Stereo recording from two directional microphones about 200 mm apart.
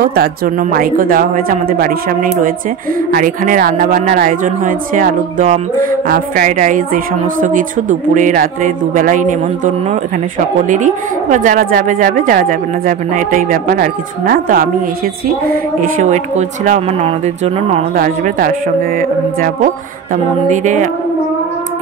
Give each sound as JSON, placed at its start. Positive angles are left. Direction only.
{"t": 0.0, "sound": "speech", "side_deg": -50}
{"t": 3.2, "sound": "speech", "side_deg": -45}
{"t": 10.7, "sound": "a woman's voice", "side_deg": -40}